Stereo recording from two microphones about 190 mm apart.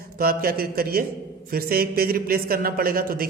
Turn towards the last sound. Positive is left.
turn(degrees=-50)  # may be behind; listen again after turning